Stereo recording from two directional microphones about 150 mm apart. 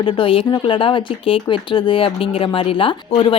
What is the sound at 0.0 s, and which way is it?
Speech, 35° left (ahead or behind).